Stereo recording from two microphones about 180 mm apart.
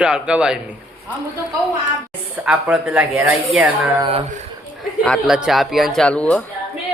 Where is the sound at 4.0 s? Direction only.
30° right (ahead or behind).